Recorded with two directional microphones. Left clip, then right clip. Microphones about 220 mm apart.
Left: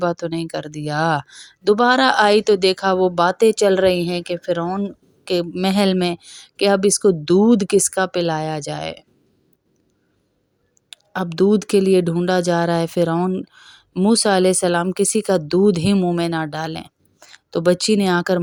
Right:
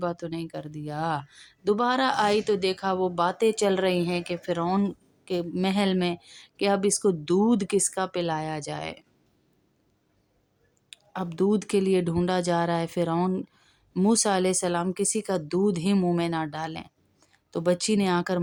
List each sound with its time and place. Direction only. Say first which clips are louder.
0.0 s speech: left 9 dB; 35° left (ahead or behind); by 4.9 s 10° left (ahead or behind)
5.2 s speech: left 8 dB; 25° left (ahead or behind)
10.8 s speech: left 9 dB; 25° left (ahead or behind)